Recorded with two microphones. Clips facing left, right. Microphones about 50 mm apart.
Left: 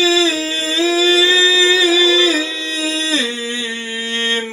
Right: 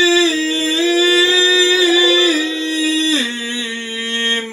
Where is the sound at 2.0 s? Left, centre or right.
Right.